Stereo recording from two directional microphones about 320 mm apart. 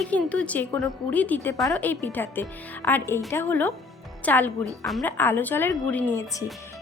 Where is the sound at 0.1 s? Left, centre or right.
Centre.